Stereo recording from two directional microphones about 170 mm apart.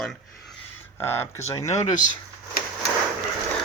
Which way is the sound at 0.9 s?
15° left (ahead or behind).